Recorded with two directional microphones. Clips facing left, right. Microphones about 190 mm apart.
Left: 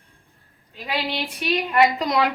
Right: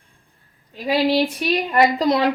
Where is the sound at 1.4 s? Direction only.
35° right (ahead or behind).